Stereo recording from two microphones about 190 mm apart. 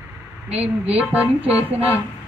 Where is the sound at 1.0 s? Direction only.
10° right (ahead or behind).